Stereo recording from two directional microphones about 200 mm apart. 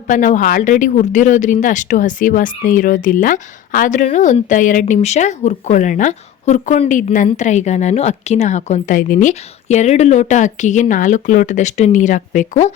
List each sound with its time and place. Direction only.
0.1 s speech: 40° left (ahead or behind)